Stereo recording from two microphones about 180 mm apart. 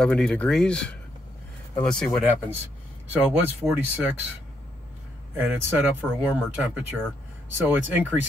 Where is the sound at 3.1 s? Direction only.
10° right (ahead or behind).